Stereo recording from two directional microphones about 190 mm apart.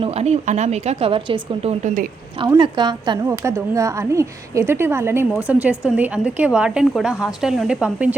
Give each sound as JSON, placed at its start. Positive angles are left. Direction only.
{"t": 0.0, "sound": "a woman's voice", "side_deg": -35}